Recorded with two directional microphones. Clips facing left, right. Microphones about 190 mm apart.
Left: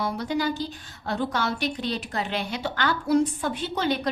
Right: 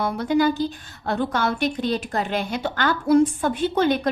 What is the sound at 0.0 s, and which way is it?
A woman's voice, 55° right (ahead or behind).